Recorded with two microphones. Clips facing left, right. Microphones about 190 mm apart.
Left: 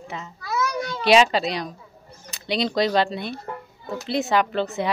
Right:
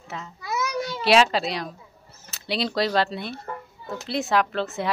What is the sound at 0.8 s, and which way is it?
Speech, centre (ahead or behind).